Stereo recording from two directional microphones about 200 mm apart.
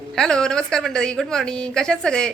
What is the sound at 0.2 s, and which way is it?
A woman's voice, 5° left (ahead or behind).